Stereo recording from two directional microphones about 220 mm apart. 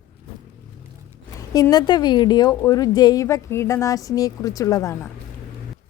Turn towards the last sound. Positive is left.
turn(degrees=15)  # may be behind; listen again after turning